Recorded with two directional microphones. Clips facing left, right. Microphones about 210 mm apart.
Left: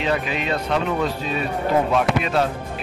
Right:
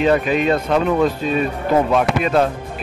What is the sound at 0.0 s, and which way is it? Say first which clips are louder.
Speech: right 7 dB; 45° right (ahead or behind).